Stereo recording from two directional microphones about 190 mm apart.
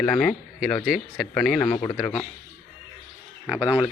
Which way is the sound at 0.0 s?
5° left (ahead or behind).